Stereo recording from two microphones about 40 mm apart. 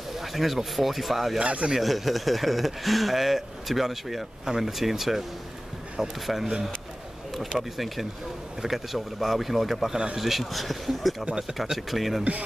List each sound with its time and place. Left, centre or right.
0.1 s speech: centre
1.4 s speech: right
1.8 s speech: centre
6.2 s speech: centre